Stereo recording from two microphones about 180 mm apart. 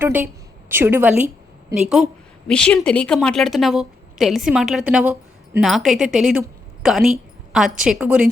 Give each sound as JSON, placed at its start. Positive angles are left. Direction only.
{"t": 0.0, "sound": "a woman's voice", "side_deg": -10}